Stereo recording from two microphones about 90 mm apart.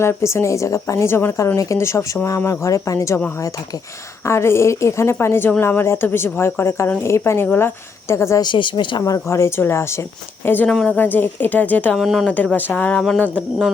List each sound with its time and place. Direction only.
0.0 s a woman's voice: 30° left (ahead or behind)
4.2 s a woman's voice: 30° left (ahead or behind)
8.4 s speech: 60° left (ahead or behind)
9.0 s a woman's voice: 35° left (ahead or behind)
10.7 s speech: 10° left (ahead or behind)
10.9 s a woman's voice: 20° left (ahead or behind)
11.9 s speech: 5° right (ahead or behind)
12.2 s speech: 15° left (ahead or behind)